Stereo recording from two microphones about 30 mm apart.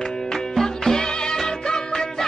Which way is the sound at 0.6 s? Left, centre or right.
Centre.